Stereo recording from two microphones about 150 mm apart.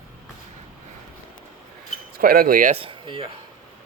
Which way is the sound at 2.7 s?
35° right (ahead or behind).